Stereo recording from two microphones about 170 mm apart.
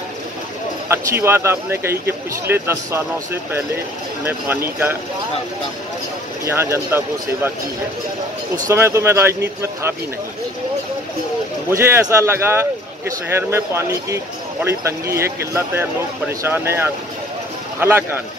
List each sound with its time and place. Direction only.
0.8 s speech: 15° right (ahead or behind)
4.2 s speech: 15° right (ahead or behind)
6.4 s speech: 15° right (ahead or behind)
8.6 s speech: 15° right (ahead or behind)
11.7 s speech: 15° right (ahead or behind)